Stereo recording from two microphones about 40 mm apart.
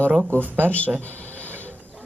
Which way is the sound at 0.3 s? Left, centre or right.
Right.